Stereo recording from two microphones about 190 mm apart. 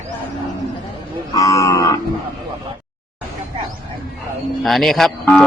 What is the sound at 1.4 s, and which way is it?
Livestock, 15° left (ahead or behind).